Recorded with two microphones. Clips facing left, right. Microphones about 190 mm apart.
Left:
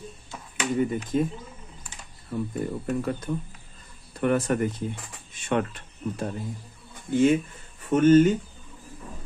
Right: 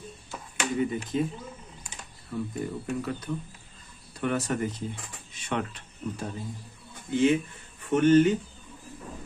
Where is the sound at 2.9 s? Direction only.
50° left (ahead or behind).